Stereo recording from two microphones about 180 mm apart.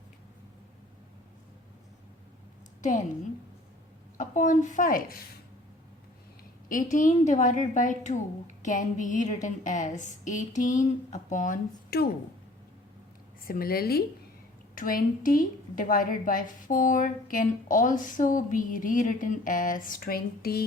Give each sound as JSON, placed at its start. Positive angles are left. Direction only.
{"t": 4.2, "sound": "a woman's voice", "side_deg": 45}
{"t": 6.7, "sound": "a woman's voice", "side_deg": 45}
{"t": 13.4, "sound": "a woman's voice", "side_deg": 55}